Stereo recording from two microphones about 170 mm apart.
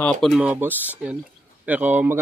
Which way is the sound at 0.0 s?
Centre (ahead or behind).